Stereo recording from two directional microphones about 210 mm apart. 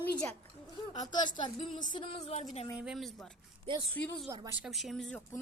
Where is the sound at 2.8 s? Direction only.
Centre (ahead or behind).